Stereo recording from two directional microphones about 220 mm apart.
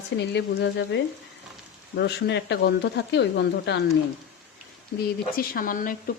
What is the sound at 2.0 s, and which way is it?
Speech, 50° left (ahead or behind).